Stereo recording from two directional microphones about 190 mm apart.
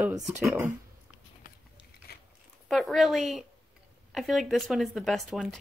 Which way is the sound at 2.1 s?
55° left (ahead or behind).